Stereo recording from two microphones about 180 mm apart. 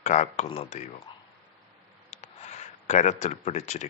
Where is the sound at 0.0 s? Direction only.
40° left (ahead or behind).